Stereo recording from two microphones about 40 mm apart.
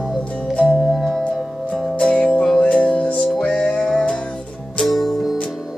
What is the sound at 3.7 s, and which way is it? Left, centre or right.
Music, centre.